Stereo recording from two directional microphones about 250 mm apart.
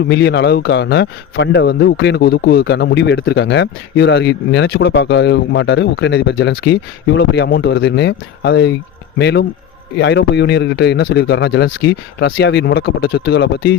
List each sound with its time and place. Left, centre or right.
0.1 s a man's voice: left